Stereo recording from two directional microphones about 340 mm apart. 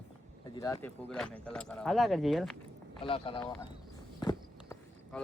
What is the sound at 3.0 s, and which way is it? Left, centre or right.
Speech, centre.